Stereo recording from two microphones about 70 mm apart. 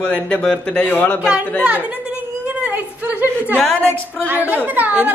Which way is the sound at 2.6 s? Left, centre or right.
Right.